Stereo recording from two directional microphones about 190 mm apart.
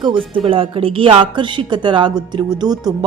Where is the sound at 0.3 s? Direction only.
30° right (ahead or behind).